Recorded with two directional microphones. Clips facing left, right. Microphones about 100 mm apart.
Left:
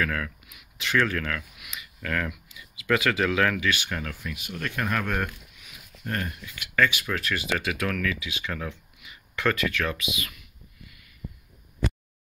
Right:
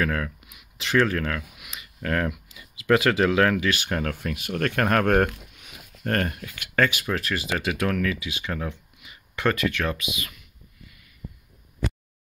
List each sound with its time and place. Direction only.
0.0 s speech: 30° right (ahead or behind); by 6.9 s 45° right (ahead or behind)
7.1 s speech: 30° right (ahead or behind)